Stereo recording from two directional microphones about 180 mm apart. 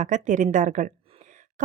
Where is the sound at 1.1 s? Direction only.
40° right (ahead or behind).